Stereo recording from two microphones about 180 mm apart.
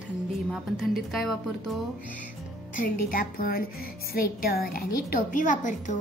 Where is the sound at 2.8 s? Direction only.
55° left (ahead or behind).